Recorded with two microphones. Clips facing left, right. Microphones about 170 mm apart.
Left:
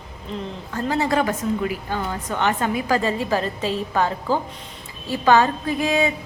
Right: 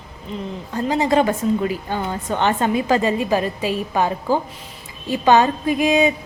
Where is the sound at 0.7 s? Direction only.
20° right (ahead or behind).